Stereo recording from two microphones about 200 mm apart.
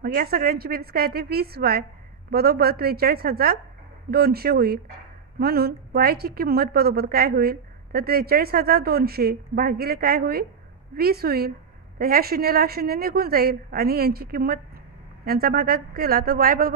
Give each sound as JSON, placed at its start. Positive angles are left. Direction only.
{"t": 0.0, "sound": "a woman's voice", "side_deg": -45}